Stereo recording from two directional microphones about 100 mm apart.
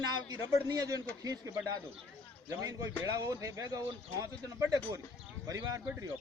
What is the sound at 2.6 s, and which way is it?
A man's voice, 30° right (ahead or behind).